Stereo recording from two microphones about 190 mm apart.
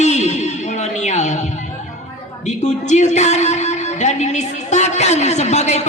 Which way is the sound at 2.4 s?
40° left (ahead or behind).